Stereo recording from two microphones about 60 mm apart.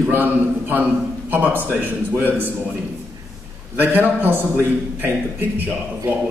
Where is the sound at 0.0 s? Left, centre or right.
Right.